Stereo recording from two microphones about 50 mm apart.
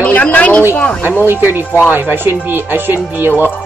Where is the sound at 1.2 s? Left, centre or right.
Right.